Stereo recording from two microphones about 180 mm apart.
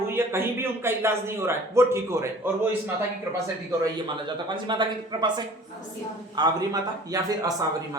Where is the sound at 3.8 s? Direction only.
25° right (ahead or behind).